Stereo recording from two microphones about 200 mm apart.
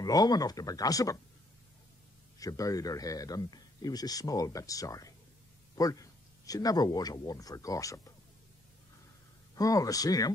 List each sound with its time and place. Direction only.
0.0 s a man's voice: 20° left (ahead or behind)
2.3 s a man's voice: 15° left (ahead or behind)
9.6 s a man's voice: 15° left (ahead or behind)